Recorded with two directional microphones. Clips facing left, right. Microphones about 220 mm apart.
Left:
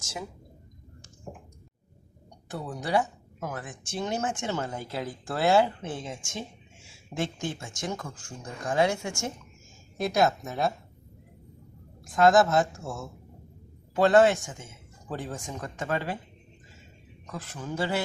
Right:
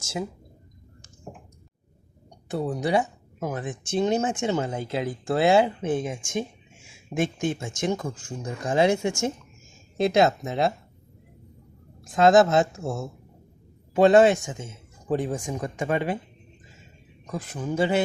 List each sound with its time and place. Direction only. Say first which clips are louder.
2.5 s speech: right 5 dB; 20° right (ahead or behind)
12.1 s speech: right 3 dB; 20° right (ahead or behind)
17.3 s speech: right 6 dB; 15° right (ahead or behind)